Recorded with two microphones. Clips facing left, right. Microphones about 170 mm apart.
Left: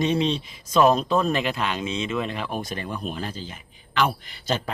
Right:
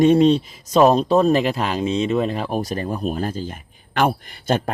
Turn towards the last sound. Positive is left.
turn(degrees=-50)  # may be behind; listen again after turning